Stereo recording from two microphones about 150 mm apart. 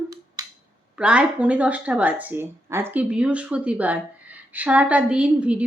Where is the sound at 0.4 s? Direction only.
25° right (ahead or behind).